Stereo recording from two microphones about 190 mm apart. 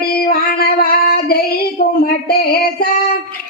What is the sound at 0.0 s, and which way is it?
Female singing, 55° left (ahead or behind).